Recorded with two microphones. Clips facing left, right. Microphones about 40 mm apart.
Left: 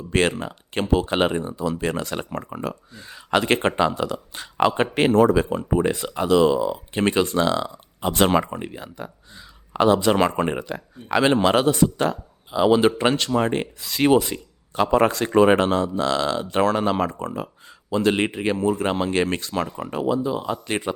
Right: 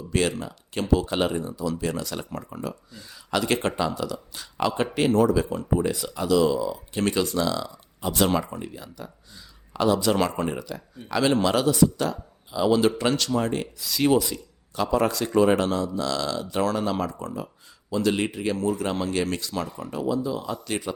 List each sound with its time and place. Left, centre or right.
0.1 s speech: left